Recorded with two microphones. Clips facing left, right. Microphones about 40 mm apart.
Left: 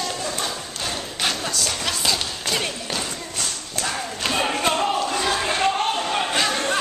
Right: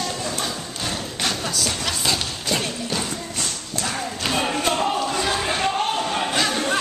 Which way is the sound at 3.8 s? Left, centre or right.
Centre.